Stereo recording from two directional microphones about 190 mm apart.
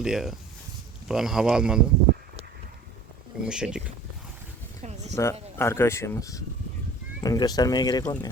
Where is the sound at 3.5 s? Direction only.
5° right (ahead or behind).